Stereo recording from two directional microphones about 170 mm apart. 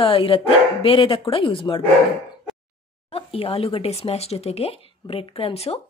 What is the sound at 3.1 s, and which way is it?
Speech, 35° left (ahead or behind).